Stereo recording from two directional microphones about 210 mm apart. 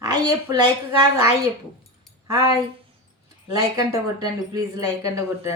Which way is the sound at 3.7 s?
15° right (ahead or behind).